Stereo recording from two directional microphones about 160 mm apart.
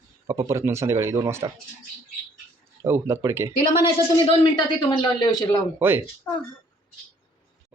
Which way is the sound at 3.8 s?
30° left (ahead or behind).